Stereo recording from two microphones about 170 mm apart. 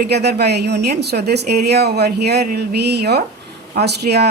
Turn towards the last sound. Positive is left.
turn(degrees=-70)  # may be behind; listen again after turning